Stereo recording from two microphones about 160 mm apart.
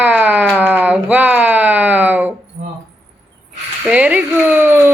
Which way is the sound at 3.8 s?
5° right (ahead or behind).